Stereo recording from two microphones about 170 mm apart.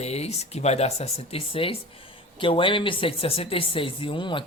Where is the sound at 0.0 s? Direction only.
40° left (ahead or behind).